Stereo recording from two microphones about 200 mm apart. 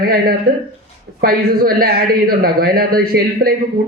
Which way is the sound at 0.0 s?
45° right (ahead or behind).